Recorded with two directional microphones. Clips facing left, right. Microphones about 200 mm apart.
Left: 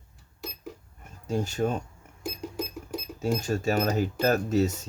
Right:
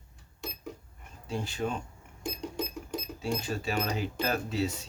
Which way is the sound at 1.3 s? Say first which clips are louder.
Left 6 dB; 45° left (ahead or behind).